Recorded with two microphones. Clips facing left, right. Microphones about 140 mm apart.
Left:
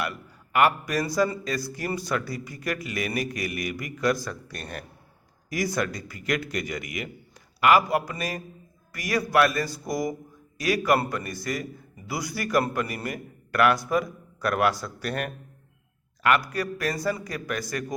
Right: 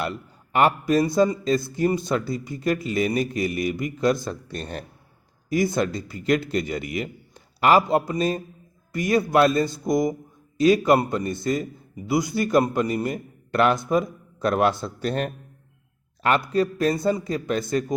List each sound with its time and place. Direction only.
0.0 s a man's voice: 30° right (ahead or behind)